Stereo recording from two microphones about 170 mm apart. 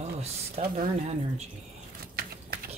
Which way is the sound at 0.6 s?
50° right (ahead or behind).